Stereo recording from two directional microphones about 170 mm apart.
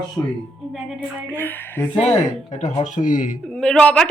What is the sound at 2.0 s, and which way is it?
Speech, 40° left (ahead or behind).